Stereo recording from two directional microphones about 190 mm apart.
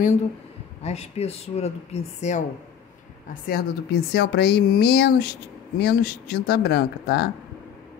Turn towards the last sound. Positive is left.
turn(degrees=55)  # may be behind; listen again after turning